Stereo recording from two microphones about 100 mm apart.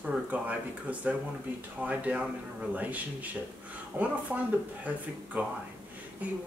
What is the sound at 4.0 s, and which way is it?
Speech, 15° right (ahead or behind).